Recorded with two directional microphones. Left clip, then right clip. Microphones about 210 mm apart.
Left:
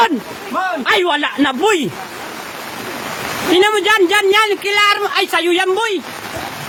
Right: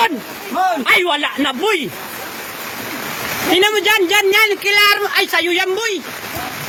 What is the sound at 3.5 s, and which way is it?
Speech, 20° left (ahead or behind).